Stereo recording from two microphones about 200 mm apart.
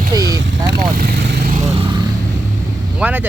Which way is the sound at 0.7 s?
55° right (ahead or behind).